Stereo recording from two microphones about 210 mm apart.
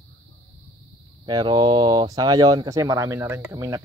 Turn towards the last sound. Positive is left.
turn(degrees=-15)  # may be behind; listen again after turning